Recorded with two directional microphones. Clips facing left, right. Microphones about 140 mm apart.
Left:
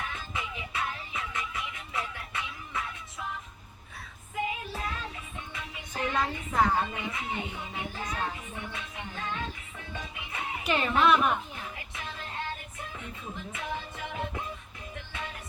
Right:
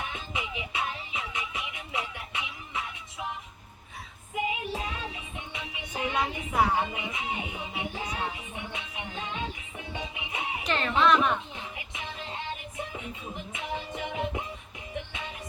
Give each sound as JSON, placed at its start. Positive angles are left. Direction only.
{"t": 0.0, "sound": "music", "side_deg": -20}
{"t": 4.4, "sound": "music", "side_deg": -15}
{"t": 10.6, "sound": "music", "side_deg": 10}
{"t": 11.0, "sound": "a woman's voice", "side_deg": 5}
{"t": 11.8, "sound": "music", "side_deg": -15}